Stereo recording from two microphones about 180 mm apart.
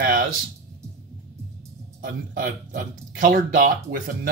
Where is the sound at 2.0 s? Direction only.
50° right (ahead or behind).